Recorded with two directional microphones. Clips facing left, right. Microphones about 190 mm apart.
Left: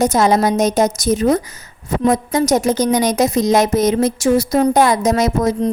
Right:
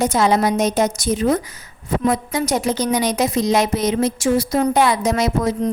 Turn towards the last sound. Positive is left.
turn(degrees=40)  # may be behind; listen again after turning